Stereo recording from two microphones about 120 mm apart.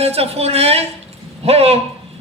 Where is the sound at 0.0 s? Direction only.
60° right (ahead or behind).